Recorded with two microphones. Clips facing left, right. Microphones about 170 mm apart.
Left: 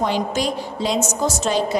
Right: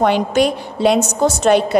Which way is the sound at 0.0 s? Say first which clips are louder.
Right 7 dB; 65° right (ahead or behind).